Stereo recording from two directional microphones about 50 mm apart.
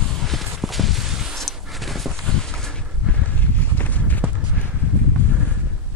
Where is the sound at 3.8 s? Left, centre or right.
Left.